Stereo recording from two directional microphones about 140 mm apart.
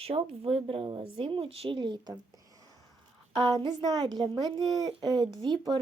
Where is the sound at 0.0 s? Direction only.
45° right (ahead or behind).